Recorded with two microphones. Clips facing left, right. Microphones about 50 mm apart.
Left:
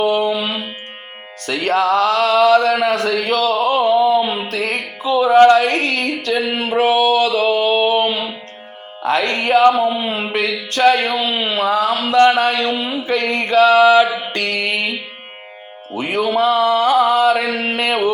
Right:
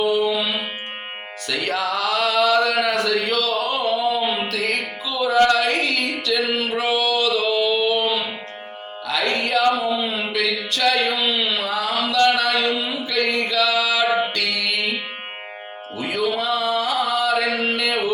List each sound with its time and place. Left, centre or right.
0.0 s music: left
6.5 s a sound: left
9.0 s speech: left
10.4 s a sound: left
14.3 s music: left
16.0 s music: left